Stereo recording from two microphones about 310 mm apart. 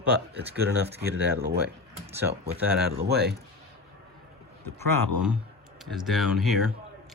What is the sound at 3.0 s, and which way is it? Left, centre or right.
Speech, right.